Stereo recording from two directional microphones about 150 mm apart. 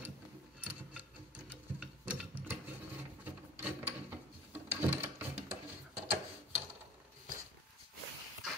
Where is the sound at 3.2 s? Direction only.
10° right (ahead or behind).